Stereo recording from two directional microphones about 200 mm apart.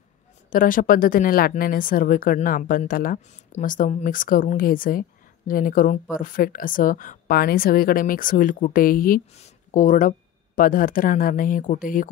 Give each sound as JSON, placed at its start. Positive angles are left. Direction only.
{"t": 0.5, "sound": "a woman's voice", "side_deg": 45}